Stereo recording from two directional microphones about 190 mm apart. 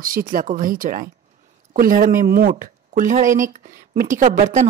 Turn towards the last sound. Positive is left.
turn(degrees=-40)  # may be behind; listen again after turning